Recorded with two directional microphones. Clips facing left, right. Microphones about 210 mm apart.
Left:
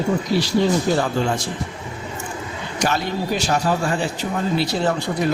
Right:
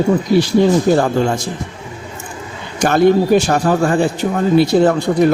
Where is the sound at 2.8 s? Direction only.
50° right (ahead or behind).